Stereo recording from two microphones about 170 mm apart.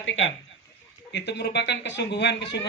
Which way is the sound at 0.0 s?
90° left.